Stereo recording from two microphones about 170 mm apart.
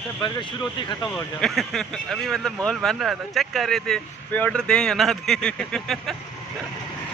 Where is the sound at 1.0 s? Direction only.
5° left (ahead or behind).